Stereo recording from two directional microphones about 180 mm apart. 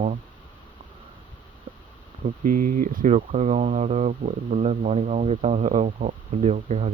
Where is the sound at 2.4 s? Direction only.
50° right (ahead or behind).